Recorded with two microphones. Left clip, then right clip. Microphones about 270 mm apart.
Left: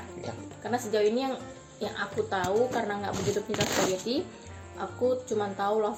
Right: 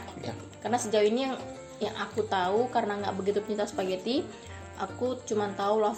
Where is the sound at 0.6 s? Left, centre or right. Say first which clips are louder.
Right 2 dB; right.